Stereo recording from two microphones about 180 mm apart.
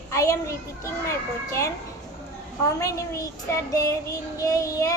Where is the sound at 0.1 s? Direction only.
15° left (ahead or behind).